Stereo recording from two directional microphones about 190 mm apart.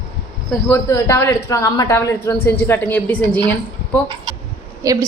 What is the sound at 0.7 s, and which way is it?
A woman's voice, 15° left (ahead or behind).